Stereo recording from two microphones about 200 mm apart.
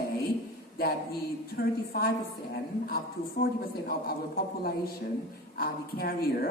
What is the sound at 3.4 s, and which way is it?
A woman's voice, 50° left (ahead or behind).